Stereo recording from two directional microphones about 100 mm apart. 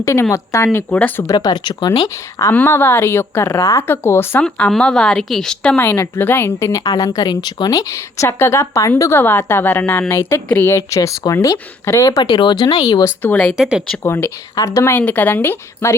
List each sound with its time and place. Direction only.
0.0 s a woman's voice: 30° left (ahead or behind)
1.3 s speech: 45° left (ahead or behind)
2.5 s a woman's voice: 20° left (ahead or behind)
4.4 s a woman's voice: 10° left (ahead or behind)
5.7 s a woman's voice: 20° left (ahead or behind)
12.2 s speech: 55° left (ahead or behind)
13.6 s speech: 5° right (ahead or behind)
14.0 s a woman's voice: 25° left (ahead or behind)
14.9 s a woman's voice: 20° left (ahead or behind)